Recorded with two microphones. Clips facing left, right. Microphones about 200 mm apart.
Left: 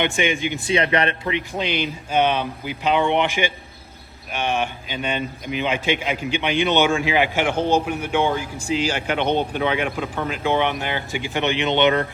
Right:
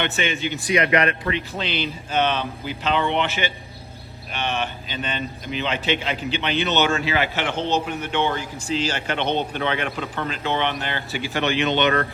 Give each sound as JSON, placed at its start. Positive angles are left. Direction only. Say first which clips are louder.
{"t": 0.0, "sound": "a man's voice", "louder": "left 3 dB", "side_deg": 15}
{"t": 0.7, "sound": "speech", "louder": "right 1 dB", "side_deg": 30}
{"t": 1.3, "sound": "a man's voice", "louder": "left 2 dB", "side_deg": 15}